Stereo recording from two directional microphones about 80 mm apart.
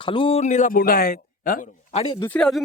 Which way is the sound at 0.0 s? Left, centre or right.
Left.